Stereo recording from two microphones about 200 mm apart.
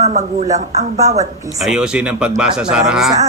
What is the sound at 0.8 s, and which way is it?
Speech, 15° right (ahead or behind).